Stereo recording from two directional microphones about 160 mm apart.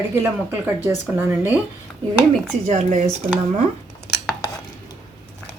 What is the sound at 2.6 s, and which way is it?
Speech, 45° right (ahead or behind).